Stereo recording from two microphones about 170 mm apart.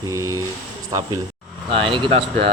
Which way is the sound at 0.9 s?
20° right (ahead or behind).